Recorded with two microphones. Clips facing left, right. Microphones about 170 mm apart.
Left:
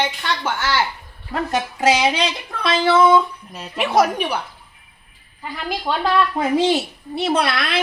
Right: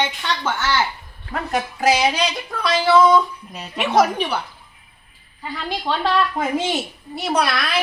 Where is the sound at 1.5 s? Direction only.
20° left (ahead or behind).